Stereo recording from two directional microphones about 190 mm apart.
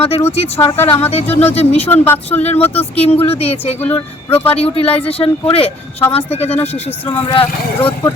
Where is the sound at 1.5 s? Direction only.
35° left (ahead or behind).